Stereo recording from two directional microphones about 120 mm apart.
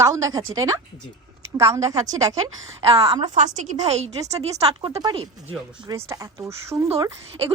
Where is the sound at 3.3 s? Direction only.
85° right; by 4.1 s 65° right (ahead or behind).